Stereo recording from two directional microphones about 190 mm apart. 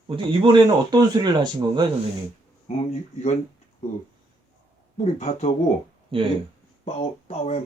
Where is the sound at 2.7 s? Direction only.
35° left (ahead or behind).